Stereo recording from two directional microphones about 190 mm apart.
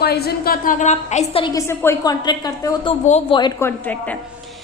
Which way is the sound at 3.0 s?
35° left (ahead or behind).